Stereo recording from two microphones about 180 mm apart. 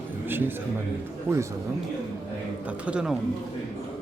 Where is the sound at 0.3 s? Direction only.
10° right (ahead or behind).